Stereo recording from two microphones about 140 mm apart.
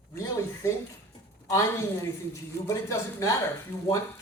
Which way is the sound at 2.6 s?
20° left (ahead or behind).